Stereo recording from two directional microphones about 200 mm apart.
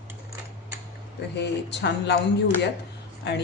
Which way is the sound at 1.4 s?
60° left (ahead or behind).